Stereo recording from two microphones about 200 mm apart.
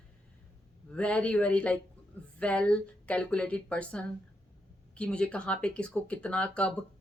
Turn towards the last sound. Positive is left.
turn(degrees=5)  # may be behind; listen again after turning